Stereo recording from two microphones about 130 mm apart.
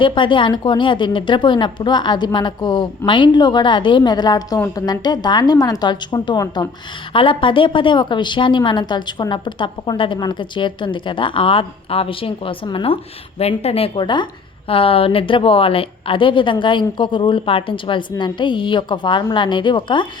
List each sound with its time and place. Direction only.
0.0 s a woman's voice: 40° left (ahead or behind)
7.1 s a woman's voice: 40° left (ahead or behind)